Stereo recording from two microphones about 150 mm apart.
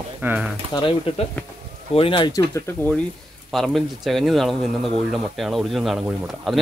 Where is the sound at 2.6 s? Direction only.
10° left (ahead or behind).